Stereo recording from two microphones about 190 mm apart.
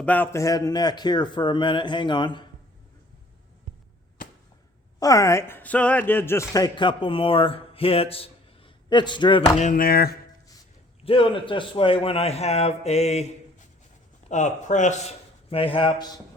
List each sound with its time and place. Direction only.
0.0 s speech: 10° left (ahead or behind)
4.9 s speech: 20° left (ahead or behind)
9.6 s a sound: 45° left (ahead or behind)
11.0 s a man's voice: 30° left (ahead or behind)